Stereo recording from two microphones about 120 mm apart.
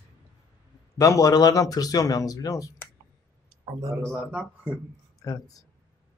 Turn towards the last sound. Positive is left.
turn(degrees=30)  # may be behind; listen again after turning